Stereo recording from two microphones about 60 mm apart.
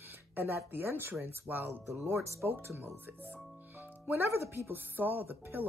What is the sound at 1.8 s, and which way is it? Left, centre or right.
Speech, right.